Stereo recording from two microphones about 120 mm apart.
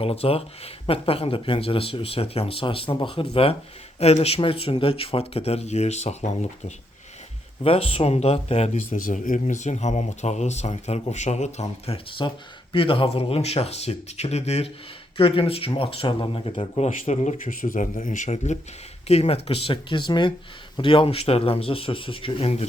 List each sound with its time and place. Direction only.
0.0 s speech: 55° left (ahead or behind)
4.0 s speech: 60° left (ahead or behind)
7.6 s speech: 55° left (ahead or behind)
12.2 s speech: 40° left (ahead or behind); by 14.7 s 60° left (ahead or behind)
15.2 s speech: 50° left (ahead or behind); by 17.3 s 70° left (ahead or behind)
17.7 s speech: 90° left; by 18.6 s 70° left (ahead or behind)
19.0 s speech: 60° left (ahead or behind)